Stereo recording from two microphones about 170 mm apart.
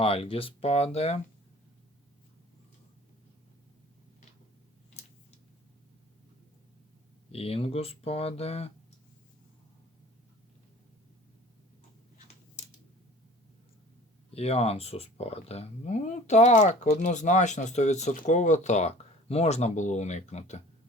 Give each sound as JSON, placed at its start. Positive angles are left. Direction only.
{"t": 0.0, "sound": "speech", "side_deg": 35}
{"t": 7.3, "sound": "speech", "side_deg": 35}
{"t": 14.3, "sound": "speech", "side_deg": 35}